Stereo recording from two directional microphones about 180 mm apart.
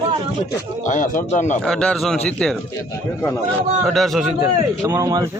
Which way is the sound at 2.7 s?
15° left (ahead or behind).